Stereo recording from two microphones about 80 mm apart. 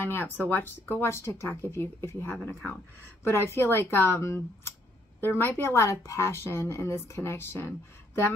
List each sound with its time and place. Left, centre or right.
0.0 s a woman's voice: left